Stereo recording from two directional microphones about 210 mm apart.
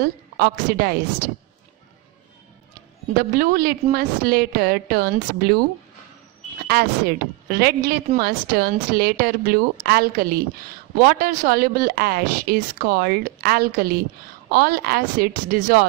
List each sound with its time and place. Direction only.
0.0 s a woman's voice: 45° right (ahead or behind)
3.2 s a woman's voice: 45° right (ahead or behind)
6.7 s a woman's voice: 45° right (ahead or behind)